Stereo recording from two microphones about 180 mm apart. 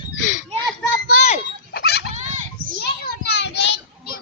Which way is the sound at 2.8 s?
65° left (ahead or behind).